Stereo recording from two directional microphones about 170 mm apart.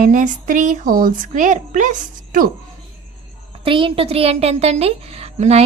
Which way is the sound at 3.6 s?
30° right (ahead or behind).